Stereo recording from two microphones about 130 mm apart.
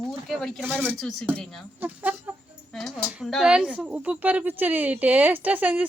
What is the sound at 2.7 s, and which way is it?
A woman's voice, 5° left (ahead or behind).